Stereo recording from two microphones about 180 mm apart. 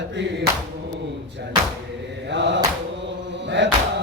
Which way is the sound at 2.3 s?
80° right.